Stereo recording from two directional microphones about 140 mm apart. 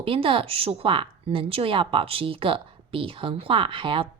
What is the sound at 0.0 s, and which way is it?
Speech, 40° right (ahead or behind).